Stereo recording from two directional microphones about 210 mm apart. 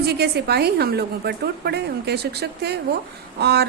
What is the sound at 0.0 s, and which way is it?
A woman's voice, 50° right (ahead or behind).